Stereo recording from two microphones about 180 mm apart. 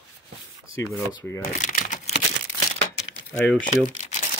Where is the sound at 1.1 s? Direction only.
15° left (ahead or behind).